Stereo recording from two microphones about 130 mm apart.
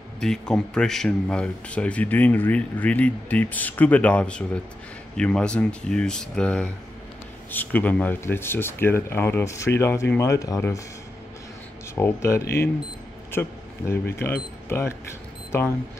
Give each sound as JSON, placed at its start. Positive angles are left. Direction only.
{"t": 0.2, "sound": "speech", "side_deg": 5}
{"t": 11.9, "sound": "speech", "side_deg": 20}